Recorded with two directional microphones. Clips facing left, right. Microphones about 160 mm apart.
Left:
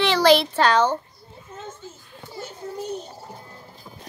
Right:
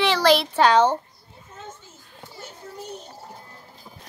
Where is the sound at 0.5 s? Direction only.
20° right (ahead or behind).